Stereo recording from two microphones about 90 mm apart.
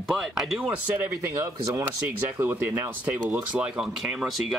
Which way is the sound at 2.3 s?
25° right (ahead or behind).